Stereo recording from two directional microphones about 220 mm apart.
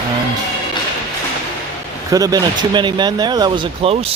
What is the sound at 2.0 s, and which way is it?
Speech, 15° right (ahead or behind).